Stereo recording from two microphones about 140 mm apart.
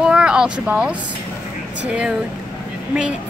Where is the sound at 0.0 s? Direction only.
5° right (ahead or behind).